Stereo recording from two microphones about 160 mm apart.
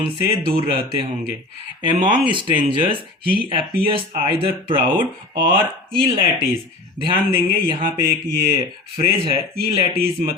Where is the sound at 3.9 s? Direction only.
30° right (ahead or behind).